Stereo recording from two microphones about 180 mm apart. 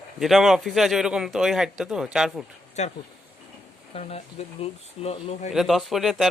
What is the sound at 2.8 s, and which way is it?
Speech, 40° left (ahead or behind).